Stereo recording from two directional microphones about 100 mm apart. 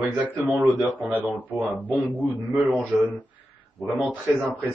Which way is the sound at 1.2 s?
20° left (ahead or behind).